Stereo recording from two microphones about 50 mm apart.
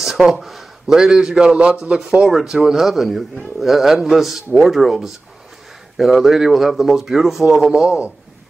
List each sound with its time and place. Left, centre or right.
0.0 s a sound: centre
0.9 s a man's voice: centre
2.2 s speech: centre